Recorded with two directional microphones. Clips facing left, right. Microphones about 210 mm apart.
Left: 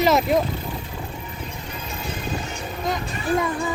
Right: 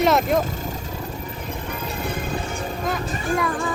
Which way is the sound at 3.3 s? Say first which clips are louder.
Left 1 dB; 25° left (ahead or behind).